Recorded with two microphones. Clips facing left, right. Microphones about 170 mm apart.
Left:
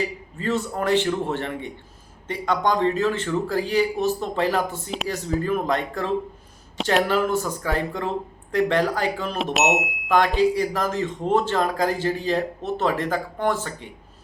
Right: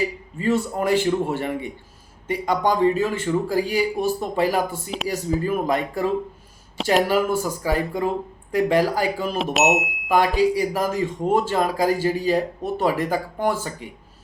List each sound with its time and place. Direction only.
0.0 s speech: 10° right (ahead or behind)